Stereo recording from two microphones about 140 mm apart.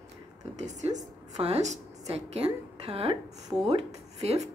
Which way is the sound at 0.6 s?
55° right (ahead or behind).